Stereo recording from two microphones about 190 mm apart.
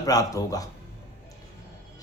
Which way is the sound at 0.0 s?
20° left (ahead or behind).